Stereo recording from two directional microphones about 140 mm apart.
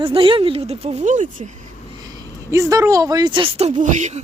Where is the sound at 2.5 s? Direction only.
20° right (ahead or behind).